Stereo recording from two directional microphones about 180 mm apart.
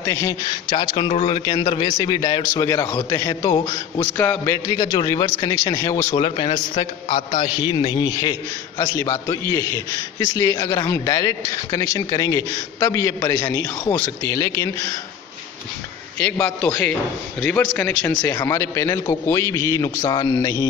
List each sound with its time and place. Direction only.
0.0 s a man's voice: 20° left (ahead or behind)
4.2 s a man's voice: 10° left (ahead or behind)
4.6 s a man's voice: 20° left (ahead or behind)
6.1 s a man's voice: 30° left (ahead or behind)
7.1 s a man's voice: 45° left (ahead or behind)
7.4 s a man's voice: 25° left (ahead or behind)
16.2 s a man's voice: 10° left (ahead or behind)